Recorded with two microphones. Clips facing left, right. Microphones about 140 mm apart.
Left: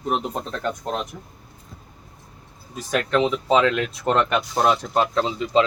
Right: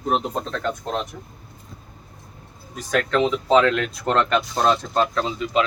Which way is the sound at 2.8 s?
10° left (ahead or behind).